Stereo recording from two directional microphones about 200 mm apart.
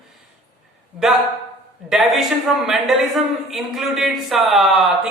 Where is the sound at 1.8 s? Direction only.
Centre (ahead or behind).